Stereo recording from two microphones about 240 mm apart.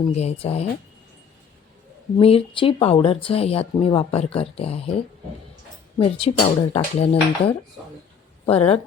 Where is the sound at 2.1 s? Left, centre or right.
Left.